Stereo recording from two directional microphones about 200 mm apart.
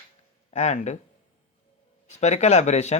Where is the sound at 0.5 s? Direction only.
35° left (ahead or behind).